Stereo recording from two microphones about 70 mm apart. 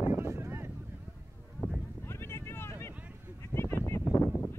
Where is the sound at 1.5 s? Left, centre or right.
Left.